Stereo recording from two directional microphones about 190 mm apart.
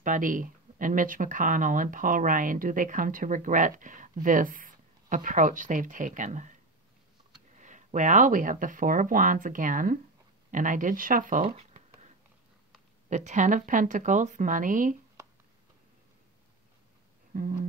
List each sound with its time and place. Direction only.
0.0 s speech: 45° right (ahead or behind)
7.5 s speech: 40° right (ahead or behind)
11.4 s speech: 35° right (ahead or behind)
13.1 s speech: 40° right (ahead or behind)
17.3 s a sound: 45° right (ahead or behind)